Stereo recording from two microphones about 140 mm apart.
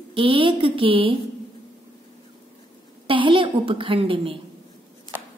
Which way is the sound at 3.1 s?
40° right (ahead or behind).